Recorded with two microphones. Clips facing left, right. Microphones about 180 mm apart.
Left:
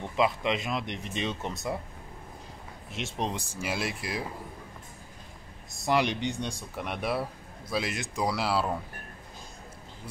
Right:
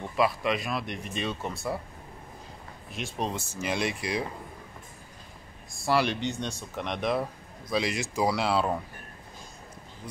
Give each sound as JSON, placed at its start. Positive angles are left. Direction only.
{"t": 0.1, "sound": "speech", "side_deg": 20}
{"t": 2.9, "sound": "speech", "side_deg": 25}
{"t": 5.7, "sound": "speech", "side_deg": 20}